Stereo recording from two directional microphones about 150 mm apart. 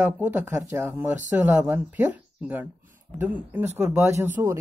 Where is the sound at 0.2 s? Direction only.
10° right (ahead or behind).